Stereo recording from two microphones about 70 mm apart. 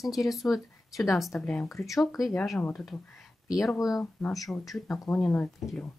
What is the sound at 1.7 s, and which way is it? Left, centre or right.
Speech, left.